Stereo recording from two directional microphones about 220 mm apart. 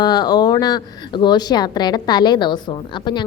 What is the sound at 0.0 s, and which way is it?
Speech, 20° left (ahead or behind).